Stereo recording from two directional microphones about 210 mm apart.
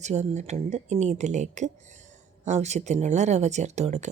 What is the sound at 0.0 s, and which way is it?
Speech, 35° right (ahead or behind).